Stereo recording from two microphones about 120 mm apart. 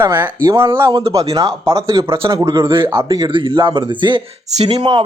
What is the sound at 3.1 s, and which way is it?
A man's voice, 35° right (ahead or behind).